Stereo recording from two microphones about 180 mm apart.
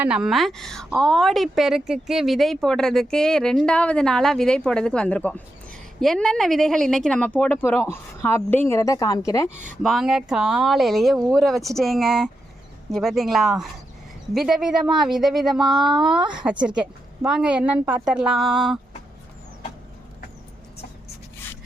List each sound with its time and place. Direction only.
0.0 s a woman's voice: 5° right (ahead or behind); by 9.5 s 15° left (ahead or behind)
9.6 s a woman's voice: centre (ahead or behind)